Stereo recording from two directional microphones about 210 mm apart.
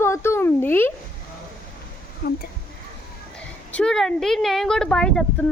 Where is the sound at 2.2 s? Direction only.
40° left (ahead or behind).